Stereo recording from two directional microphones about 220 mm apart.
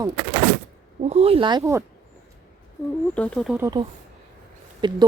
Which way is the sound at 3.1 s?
5° left (ahead or behind).